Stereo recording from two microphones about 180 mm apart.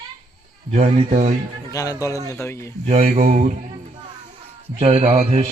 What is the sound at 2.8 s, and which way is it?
Speech, 40° right (ahead or behind).